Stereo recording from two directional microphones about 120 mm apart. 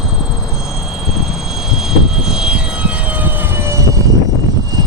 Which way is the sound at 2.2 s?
5° right (ahead or behind).